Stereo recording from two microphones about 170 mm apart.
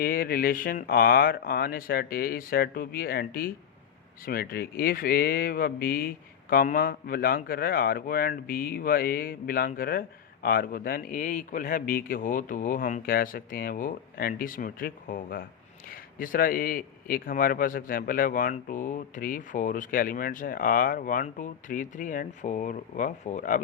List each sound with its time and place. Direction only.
0.0 s a man's voice: 60° left (ahead or behind)